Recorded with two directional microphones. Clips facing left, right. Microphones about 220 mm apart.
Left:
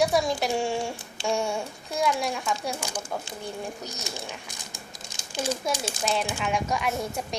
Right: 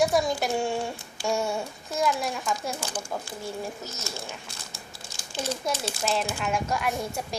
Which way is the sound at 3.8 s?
15° left (ahead or behind).